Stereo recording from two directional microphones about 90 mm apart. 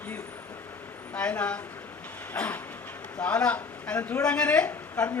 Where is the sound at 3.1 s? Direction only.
15° left (ahead or behind).